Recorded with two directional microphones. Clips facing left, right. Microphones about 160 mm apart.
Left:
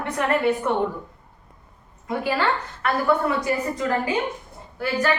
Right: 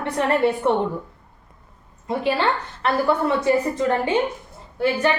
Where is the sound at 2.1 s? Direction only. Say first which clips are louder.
Right 2 dB; 30° right (ahead or behind).